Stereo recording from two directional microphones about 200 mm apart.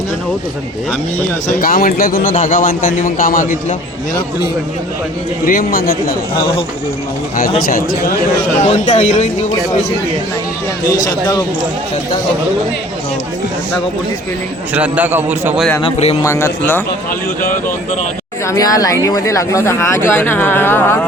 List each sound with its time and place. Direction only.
1.5 s a man's voice: 45° left (ahead or behind)
5.5 s a man's voice: 45° left (ahead or behind)
7.7 s a man's voice: 45° left (ahead or behind)
10.8 s speech: 20° left (ahead or behind)
14.7 s a man's voice: 10° right (ahead or behind)
15.8 s speech: 30° left (ahead or behind)
16.2 s speech: 15° left (ahead or behind)
18.4 s speech: 15° left (ahead or behind)